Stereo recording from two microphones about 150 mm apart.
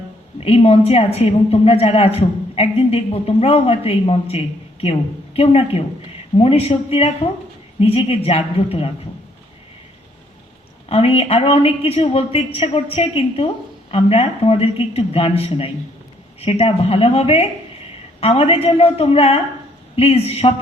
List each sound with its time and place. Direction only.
0.3 s a woman's voice: 40° left (ahead or behind)
10.8 s a woman's voice: 40° left (ahead or behind)